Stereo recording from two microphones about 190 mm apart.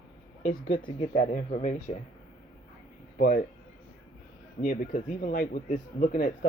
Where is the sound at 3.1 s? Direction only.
50° left (ahead or behind).